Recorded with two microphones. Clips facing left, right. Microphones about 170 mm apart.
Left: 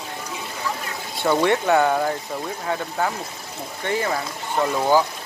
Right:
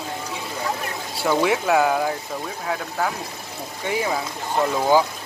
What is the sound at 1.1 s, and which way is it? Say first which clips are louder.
Speech: left 1 dB; 5° right (ahead or behind).